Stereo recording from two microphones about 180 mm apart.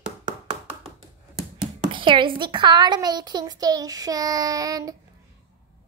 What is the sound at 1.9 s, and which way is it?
A woman's voice, 25° right (ahead or behind).